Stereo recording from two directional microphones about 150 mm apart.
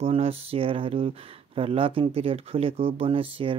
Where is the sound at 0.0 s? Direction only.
40° right (ahead or behind).